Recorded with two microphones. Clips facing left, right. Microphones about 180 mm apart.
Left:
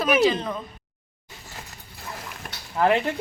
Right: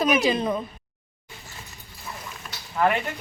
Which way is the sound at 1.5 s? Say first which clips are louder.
Left 3 dB; 65° left (ahead or behind).